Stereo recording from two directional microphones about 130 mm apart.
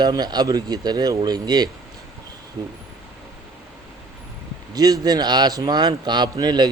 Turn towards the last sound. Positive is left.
turn(degrees=-35)  # may be behind; listen again after turning